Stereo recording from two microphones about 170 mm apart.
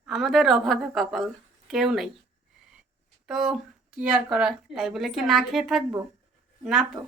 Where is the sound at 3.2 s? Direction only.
Centre (ahead or behind).